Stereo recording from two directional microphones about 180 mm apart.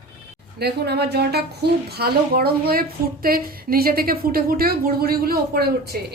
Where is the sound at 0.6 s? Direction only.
65° right (ahead or behind).